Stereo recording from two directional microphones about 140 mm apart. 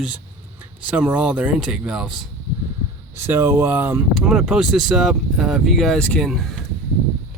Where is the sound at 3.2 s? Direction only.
15° right (ahead or behind).